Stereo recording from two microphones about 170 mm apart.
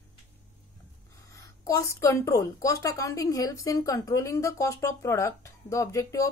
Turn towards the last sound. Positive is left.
turn(degrees=20)  # may be behind; listen again after turning